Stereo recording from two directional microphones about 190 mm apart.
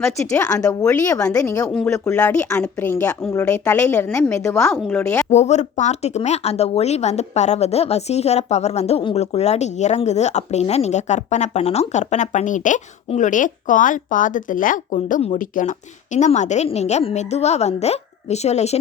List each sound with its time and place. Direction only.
0.0 s speech: 15° left (ahead or behind)
1.7 s speech: 5° left (ahead or behind)
4.8 s speech: 5° left (ahead or behind)
5.3 s speech: 35° left (ahead or behind)